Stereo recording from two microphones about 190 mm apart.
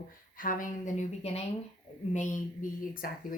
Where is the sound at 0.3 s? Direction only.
45° left (ahead or behind).